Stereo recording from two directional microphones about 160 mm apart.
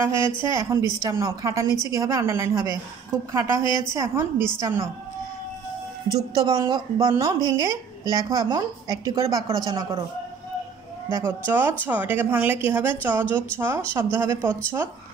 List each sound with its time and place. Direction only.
0.0 s a woman's voice: 15° right (ahead or behind)
6.1 s a woman's voice: 25° right (ahead or behind)
11.1 s a woman's voice: 20° right (ahead or behind)